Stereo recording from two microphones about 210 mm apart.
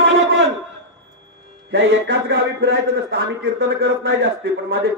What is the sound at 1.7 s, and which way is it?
A man's voice, 60° right (ahead or behind).